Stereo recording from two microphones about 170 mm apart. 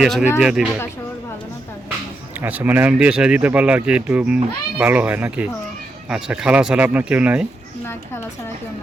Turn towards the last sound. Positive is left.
turn(degrees=-5)  # may be behind; listen again after turning